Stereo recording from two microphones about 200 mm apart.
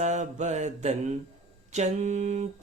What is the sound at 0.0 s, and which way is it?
Speech, 35° right (ahead or behind).